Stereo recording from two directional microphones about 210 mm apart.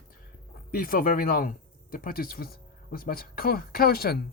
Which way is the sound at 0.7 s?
45° left (ahead or behind).